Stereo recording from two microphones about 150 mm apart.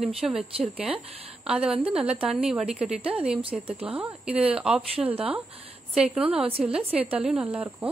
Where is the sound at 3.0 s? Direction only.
40° right (ahead or behind).